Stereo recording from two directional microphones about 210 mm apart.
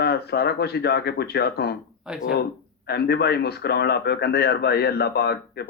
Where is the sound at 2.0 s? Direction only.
5° right (ahead or behind).